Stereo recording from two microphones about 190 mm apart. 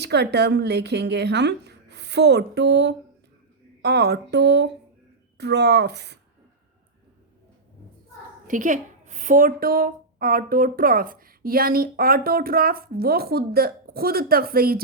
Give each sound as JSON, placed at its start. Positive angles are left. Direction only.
{"t": 0.0, "sound": "speech", "side_deg": -60}
{"t": 8.4, "sound": "a woman's voice", "side_deg": -45}